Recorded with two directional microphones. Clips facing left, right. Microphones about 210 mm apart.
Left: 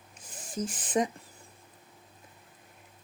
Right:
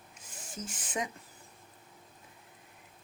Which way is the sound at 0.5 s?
35° left (ahead or behind).